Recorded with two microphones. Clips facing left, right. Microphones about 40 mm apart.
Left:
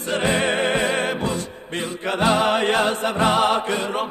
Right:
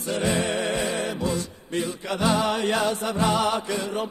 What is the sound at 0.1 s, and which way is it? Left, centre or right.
Music, left.